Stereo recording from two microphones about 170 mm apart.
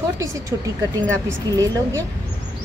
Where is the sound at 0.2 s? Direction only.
20° right (ahead or behind).